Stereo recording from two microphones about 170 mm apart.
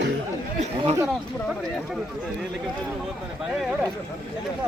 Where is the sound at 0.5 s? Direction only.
40° right (ahead or behind).